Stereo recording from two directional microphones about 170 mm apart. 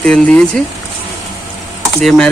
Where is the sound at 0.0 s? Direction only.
5° left (ahead or behind).